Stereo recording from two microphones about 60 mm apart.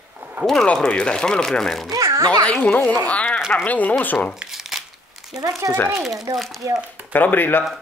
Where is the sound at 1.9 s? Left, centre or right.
Right.